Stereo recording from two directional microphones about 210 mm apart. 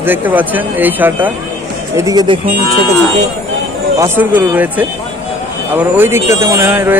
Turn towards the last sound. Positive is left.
turn(degrees=-10)  # may be behind; listen again after turning